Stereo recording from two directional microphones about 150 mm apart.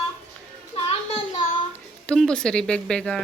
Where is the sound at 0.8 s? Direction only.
45° left (ahead or behind).